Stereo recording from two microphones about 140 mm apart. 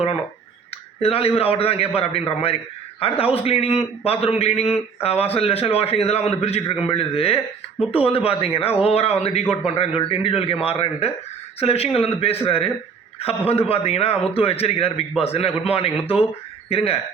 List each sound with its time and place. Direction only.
1.0 s a man's voice: 45° left (ahead or behind)